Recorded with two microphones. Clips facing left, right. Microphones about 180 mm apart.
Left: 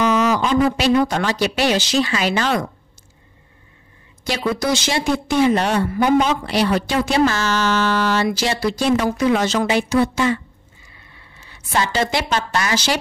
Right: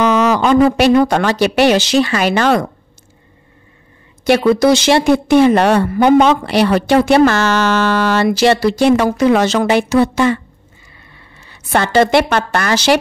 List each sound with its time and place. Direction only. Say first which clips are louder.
0.0 s a woman's voice: right 5 dB; 70° right (ahead or behind)
4.2 s a woman's voice: right 11 dB; 65° right (ahead or behind)
11.7 s a woman's voice: right 8 dB; 60° right (ahead or behind)